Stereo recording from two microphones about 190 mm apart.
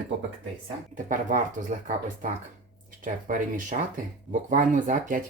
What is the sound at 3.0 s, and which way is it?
Speech, 45° right (ahead or behind).